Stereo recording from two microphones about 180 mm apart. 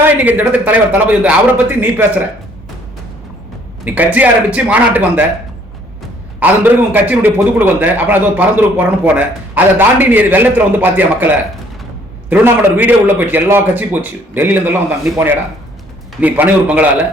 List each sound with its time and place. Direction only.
0.0 s a man's voice: 10° right (ahead or behind)
3.8 s a man's voice: 10° right (ahead or behind)
6.4 s a man's voice: 10° right (ahead or behind)
12.3 s a man's voice: 10° right (ahead or behind)